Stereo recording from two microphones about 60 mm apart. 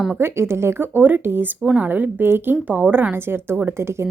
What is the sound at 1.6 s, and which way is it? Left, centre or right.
Speech, centre.